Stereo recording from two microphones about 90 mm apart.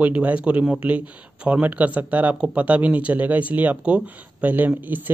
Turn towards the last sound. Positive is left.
turn(degrees=-20)  # may be behind; listen again after turning